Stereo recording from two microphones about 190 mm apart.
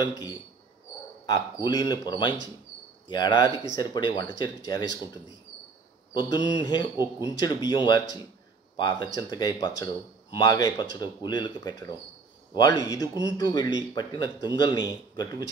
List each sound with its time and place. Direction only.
0.0 s speech: 20° left (ahead or behind)